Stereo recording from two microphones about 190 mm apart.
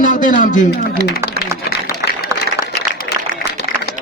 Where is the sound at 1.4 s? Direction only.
55° right (ahead or behind).